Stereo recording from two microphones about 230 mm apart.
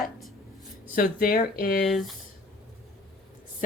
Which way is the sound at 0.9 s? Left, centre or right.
Left.